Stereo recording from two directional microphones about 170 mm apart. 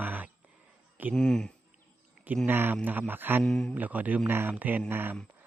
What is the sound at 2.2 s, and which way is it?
Speech, 10° right (ahead or behind).